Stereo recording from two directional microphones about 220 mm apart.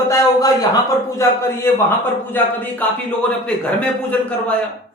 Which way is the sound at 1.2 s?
10° left (ahead or behind).